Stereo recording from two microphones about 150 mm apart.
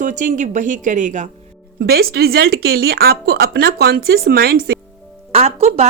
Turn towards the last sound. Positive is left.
turn(degrees=-45)  # may be behind; listen again after turning